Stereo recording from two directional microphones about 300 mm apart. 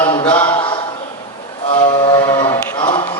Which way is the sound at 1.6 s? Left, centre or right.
Centre.